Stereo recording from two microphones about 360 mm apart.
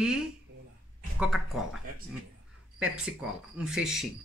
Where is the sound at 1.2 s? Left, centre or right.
Centre.